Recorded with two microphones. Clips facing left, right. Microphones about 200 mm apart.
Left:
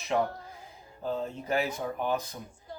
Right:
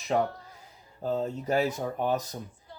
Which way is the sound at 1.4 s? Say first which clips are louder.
Right 2 dB; 40° right (ahead or behind).